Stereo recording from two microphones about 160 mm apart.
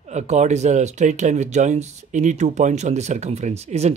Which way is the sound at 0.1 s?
45° right (ahead or behind).